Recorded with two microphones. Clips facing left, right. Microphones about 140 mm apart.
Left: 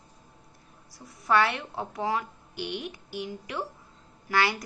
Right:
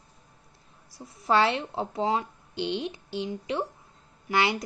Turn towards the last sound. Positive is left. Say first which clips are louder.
# right 1 dB
turn(degrees=-20)  # may be behind; listen again after turning